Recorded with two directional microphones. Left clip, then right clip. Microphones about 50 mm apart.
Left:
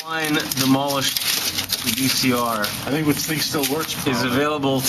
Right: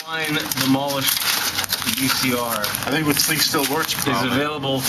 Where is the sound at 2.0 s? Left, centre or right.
Centre.